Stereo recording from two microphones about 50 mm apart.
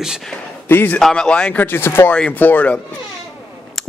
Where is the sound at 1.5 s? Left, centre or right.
Left.